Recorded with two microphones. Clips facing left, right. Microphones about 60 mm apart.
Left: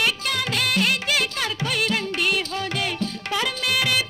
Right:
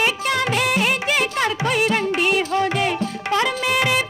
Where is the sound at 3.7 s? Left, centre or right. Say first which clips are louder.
Right 3 dB; centre.